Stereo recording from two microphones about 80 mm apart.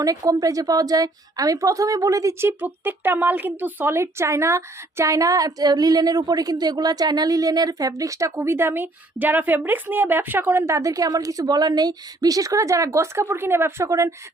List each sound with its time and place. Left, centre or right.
0.0 s a woman's voice: right
2.4 s speech: right